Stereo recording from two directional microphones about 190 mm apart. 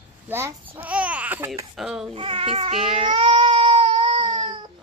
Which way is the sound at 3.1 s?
30° right (ahead or behind).